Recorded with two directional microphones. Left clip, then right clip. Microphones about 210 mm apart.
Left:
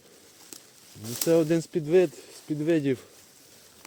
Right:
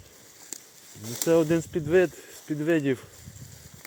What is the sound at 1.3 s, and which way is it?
Speech, 20° left (ahead or behind).